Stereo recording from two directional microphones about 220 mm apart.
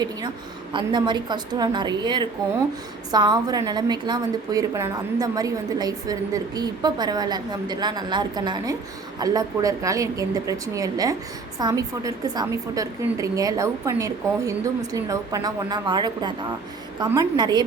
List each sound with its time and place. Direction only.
0.7 s a woman's voice: 20° right (ahead or behind)